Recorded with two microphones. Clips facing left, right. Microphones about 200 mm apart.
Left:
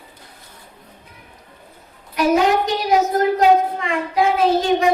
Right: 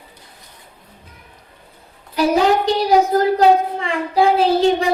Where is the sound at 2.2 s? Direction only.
30° right (ahead or behind).